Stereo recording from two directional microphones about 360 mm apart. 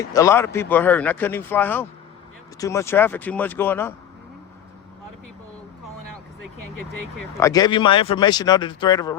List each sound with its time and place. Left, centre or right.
0.0 s speech: centre
6.6 s speech: right
7.3 s a man's voice: centre